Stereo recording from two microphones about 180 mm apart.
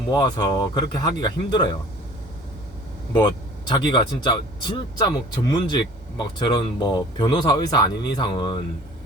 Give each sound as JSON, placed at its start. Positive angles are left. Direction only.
{"t": 0.1, "sound": "speech", "side_deg": 20}
{"t": 3.1, "sound": "speech", "side_deg": 25}